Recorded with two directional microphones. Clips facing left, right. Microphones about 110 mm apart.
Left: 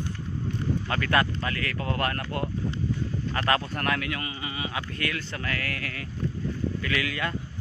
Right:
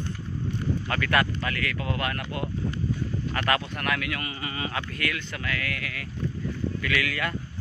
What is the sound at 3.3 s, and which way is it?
Speech, 30° left (ahead or behind).